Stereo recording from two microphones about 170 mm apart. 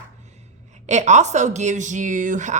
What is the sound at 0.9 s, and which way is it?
Speech, 45° right (ahead or behind).